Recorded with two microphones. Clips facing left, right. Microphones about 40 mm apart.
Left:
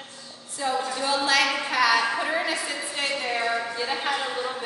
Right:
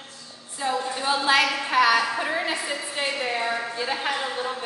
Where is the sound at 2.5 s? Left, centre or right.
Centre.